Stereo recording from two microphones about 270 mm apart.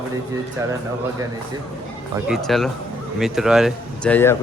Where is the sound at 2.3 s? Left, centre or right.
Centre.